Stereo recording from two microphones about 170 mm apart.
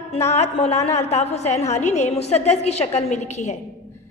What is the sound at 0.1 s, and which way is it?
A woman's voice, 40° left (ahead or behind).